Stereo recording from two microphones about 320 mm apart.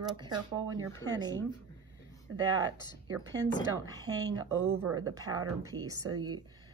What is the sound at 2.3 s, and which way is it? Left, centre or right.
Speech, right.